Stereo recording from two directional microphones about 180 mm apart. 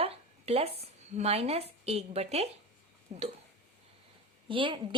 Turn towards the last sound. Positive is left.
turn(degrees=-30)  # may be behind; listen again after turning